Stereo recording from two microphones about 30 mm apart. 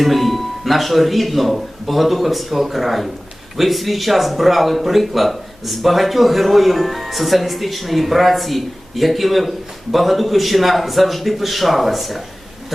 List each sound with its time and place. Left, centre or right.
0.0 s a man's voice: centre